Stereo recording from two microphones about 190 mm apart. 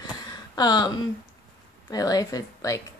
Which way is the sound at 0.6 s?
20° left (ahead or behind).